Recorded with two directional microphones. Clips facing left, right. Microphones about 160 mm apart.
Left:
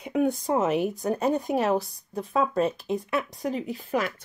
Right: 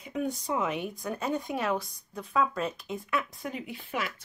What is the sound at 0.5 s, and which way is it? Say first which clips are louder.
Speech: left 7 dB; 40° left (ahead or behind).